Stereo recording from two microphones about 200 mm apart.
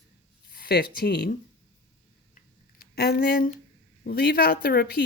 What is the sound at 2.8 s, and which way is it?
Speech, 50° left (ahead or behind).